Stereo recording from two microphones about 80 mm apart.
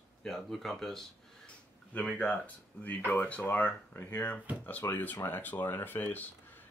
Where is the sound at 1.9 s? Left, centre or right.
Centre.